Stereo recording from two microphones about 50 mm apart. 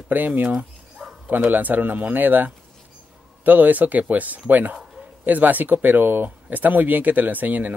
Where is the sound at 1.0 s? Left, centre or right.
Centre.